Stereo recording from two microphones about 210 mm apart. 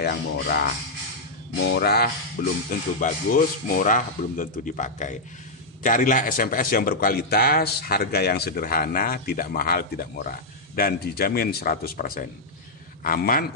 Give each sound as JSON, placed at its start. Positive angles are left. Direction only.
{"t": 0.0, "sound": "a man's voice", "side_deg": 45}